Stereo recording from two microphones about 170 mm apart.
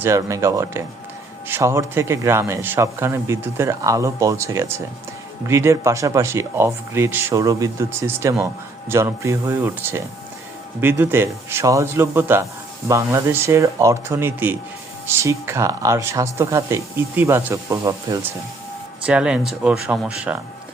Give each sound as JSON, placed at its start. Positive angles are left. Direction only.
{"t": 0.0, "sound": "a man's voice", "side_deg": -15}
{"t": 19.0, "sound": "a man's voice", "side_deg": -5}